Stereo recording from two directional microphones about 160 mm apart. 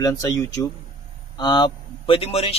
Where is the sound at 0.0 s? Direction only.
25° left (ahead or behind).